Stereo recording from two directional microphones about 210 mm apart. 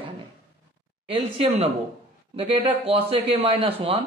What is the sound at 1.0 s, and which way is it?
A man's voice, 30° right (ahead or behind).